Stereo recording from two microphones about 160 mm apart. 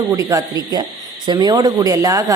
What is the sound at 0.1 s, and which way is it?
Speech, 20° right (ahead or behind).